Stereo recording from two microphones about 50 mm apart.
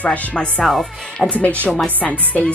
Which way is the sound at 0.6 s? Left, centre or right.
Centre.